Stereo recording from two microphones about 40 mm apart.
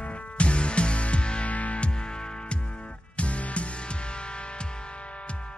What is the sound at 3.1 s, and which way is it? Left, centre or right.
Music, left.